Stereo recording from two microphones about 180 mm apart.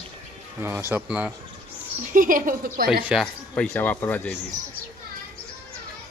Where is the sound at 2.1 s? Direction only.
50° right (ahead or behind).